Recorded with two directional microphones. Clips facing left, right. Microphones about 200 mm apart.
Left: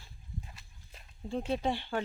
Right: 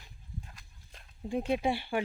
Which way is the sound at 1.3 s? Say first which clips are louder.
Right 2 dB; 15° right (ahead or behind).